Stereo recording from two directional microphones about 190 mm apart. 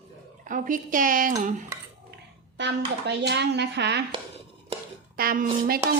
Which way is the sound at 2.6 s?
65° right (ahead or behind).